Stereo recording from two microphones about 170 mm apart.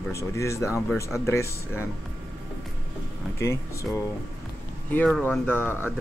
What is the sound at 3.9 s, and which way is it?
Speech, 5° left (ahead or behind).